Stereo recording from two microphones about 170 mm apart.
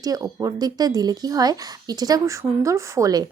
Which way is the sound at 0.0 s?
20° right (ahead or behind).